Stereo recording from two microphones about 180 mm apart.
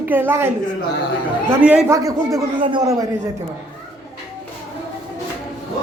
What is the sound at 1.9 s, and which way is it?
Speech, 20° right (ahead or behind).